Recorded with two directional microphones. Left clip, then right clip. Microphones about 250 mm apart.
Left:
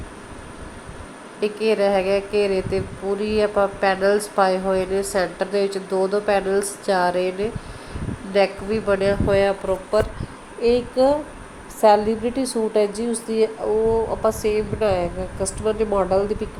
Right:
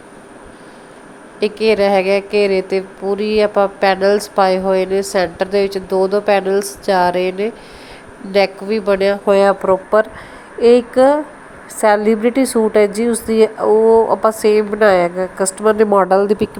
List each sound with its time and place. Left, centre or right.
1.4 s a woman's voice: right